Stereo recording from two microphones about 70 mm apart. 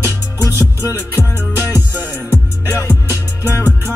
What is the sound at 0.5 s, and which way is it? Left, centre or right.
Music, left.